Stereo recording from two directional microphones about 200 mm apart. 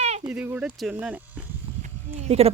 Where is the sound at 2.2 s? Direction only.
30° right (ahead or behind).